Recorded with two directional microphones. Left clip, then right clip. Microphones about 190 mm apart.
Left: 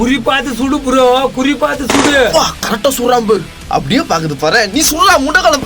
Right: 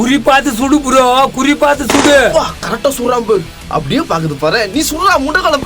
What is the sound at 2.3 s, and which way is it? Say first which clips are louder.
Speech: left 1 dB; 25° left (ahead or behind).